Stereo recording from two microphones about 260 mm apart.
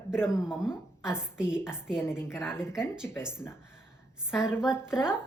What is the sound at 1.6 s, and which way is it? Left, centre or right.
Speech, centre.